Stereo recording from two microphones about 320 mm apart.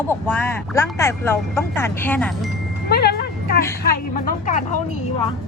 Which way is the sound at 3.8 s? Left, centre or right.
Left.